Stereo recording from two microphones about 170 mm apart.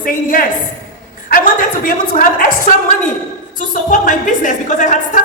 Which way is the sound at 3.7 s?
50° left (ahead or behind).